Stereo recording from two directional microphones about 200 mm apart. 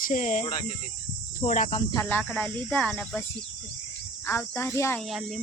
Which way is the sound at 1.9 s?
10° left (ahead or behind).